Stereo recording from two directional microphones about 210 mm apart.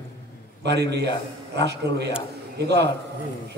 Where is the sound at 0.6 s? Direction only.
55° right (ahead or behind).